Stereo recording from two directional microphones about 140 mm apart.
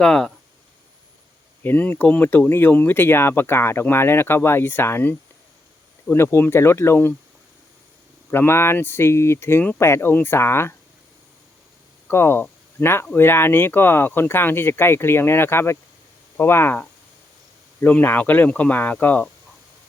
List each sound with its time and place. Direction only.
0.0 s speech: 5° left (ahead or behind)
1.6 s speech: 10° left (ahead or behind)
8.3 s speech: 15° left (ahead or behind)
12.0 s speech: 15° left (ahead or behind)